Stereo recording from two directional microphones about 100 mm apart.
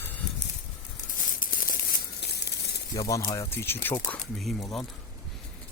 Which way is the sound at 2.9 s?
40° left (ahead or behind).